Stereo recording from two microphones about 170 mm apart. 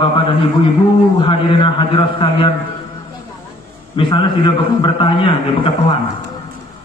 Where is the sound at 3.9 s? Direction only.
30° left (ahead or behind).